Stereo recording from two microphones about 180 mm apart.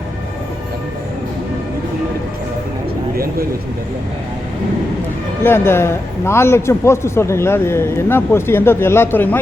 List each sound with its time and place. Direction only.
5.4 s a man's voice: 15° left (ahead or behind)